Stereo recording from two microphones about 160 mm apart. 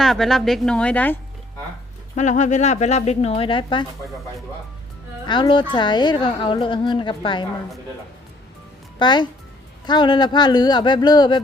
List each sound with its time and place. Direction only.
0.0 s speech: centre (ahead or behind)
2.1 s speech: 50° left (ahead or behind); by 3.8 s 30° left (ahead or behind)
5.2 s speech: 30° left (ahead or behind)
9.0 s a child's voice: 30° left (ahead or behind)